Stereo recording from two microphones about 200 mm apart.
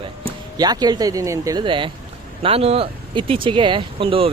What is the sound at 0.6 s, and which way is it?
Speech, 20° right (ahead or behind).